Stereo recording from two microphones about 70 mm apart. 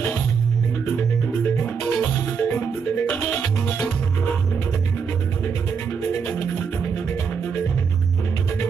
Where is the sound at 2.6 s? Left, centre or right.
Left.